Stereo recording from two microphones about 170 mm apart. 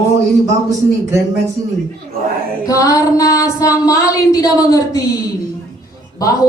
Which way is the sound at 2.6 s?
20° left (ahead or behind).